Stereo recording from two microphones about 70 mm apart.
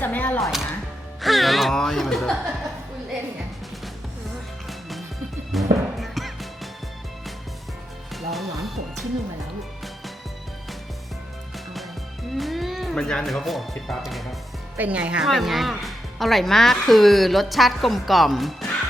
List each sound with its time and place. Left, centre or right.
0.0 s music: left
0.3 s speech: centre
1.2 s music: centre
5.5 s music: centre
8.1 s music: centre
11.5 s music: centre
13.2 s a woman's voice: centre
14.8 s speech: centre
15.2 s a woman's voice: centre